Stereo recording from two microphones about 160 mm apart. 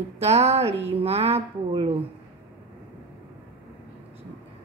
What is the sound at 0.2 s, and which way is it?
Speech, 40° right (ahead or behind).